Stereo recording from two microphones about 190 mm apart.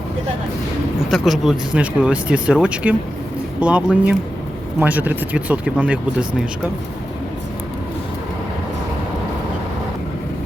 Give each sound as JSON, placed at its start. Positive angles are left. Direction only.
{"t": 1.1, "sound": "speech", "side_deg": 0}